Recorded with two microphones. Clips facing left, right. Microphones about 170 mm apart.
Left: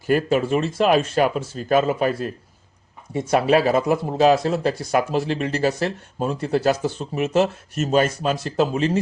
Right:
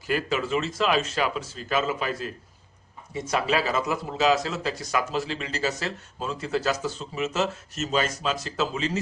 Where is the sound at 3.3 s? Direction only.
55° left (ahead or behind).